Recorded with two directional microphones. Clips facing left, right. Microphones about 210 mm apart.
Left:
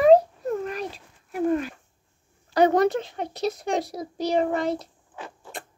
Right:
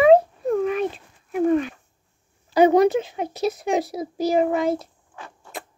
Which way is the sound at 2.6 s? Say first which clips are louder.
Right 4 dB; 5° right (ahead or behind).